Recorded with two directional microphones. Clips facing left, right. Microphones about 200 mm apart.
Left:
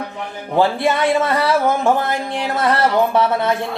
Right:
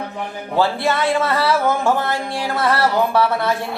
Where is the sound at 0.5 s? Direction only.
20° left (ahead or behind).